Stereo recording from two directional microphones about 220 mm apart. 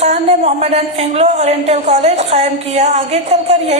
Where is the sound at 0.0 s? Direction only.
30° right (ahead or behind).